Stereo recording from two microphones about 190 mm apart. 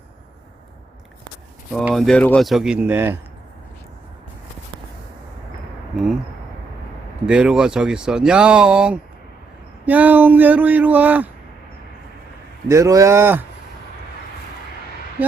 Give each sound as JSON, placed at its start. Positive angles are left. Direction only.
{"t": 1.7, "sound": "speech", "side_deg": 0}
{"t": 5.9, "sound": "a sound", "side_deg": 0}
{"t": 7.3, "sound": "speech", "side_deg": -5}
{"t": 12.6, "sound": "speech", "side_deg": -15}